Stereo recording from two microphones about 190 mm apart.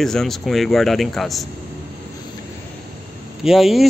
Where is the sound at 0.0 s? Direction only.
Centre (ahead or behind).